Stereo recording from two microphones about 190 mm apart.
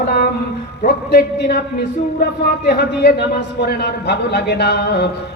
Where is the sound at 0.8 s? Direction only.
55° left (ahead or behind).